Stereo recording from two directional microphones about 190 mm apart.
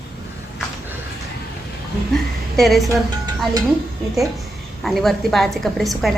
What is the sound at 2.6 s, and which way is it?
Speech, centre (ahead or behind).